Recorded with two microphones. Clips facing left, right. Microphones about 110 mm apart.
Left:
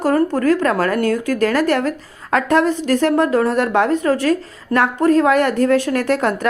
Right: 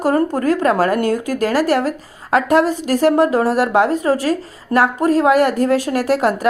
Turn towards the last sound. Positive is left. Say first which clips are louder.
# right 1 dB
turn(degrees=-10)  # may be behind; listen again after turning